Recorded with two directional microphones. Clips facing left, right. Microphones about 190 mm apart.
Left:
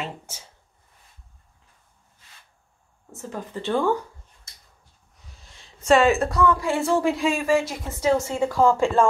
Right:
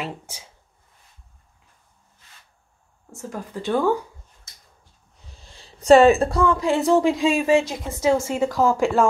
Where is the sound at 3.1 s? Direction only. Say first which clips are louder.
Right 1 dB; 10° right (ahead or behind).